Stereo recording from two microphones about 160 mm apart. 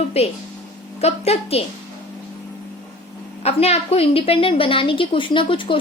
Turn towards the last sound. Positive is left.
turn(degrees=30)  # may be behind; listen again after turning